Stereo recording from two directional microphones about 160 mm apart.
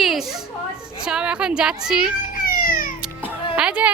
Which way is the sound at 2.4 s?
65° left (ahead or behind).